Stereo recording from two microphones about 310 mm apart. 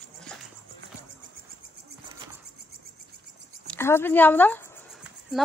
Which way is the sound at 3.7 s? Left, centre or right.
Centre.